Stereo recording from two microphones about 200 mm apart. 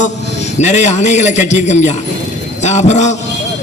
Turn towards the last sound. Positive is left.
turn(degrees=35)  # may be behind; listen again after turning